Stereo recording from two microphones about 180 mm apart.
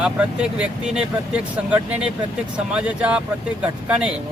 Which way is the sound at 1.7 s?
5° right (ahead or behind).